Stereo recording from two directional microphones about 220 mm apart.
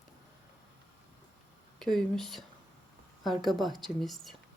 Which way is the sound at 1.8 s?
Centre (ahead or behind).